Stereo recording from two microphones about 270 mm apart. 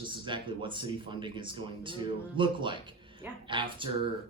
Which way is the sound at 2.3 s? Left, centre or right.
Centre.